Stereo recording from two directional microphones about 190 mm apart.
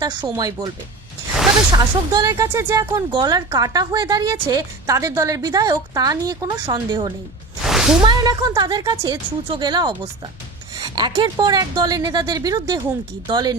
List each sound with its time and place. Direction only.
0.0 s speech: 20° right (ahead or behind)
1.7 s speech: 20° right (ahead or behind)
7.6 s a sound: centre (ahead or behind)
8.0 s speech: 20° right (ahead or behind)